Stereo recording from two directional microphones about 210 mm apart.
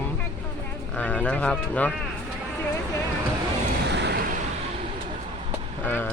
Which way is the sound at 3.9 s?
55° right (ahead or behind).